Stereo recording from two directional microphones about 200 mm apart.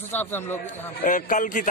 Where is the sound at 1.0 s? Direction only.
40° left (ahead or behind).